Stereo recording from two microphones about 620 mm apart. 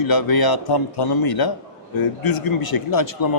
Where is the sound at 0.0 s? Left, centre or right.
Left.